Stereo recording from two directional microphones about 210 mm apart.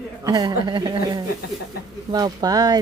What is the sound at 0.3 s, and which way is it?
Speech, 20° right (ahead or behind).